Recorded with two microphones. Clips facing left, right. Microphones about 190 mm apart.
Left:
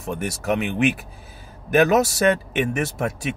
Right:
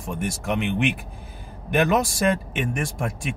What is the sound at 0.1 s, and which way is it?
Speech, 70° left (ahead or behind).